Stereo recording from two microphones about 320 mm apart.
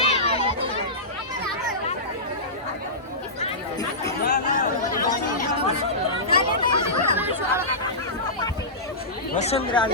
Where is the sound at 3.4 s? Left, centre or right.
Centre.